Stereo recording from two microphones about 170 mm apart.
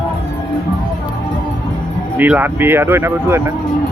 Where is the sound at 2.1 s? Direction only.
10° right (ahead or behind).